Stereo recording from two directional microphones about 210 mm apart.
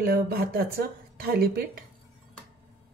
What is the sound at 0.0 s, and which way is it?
Speech, 45° right (ahead or behind).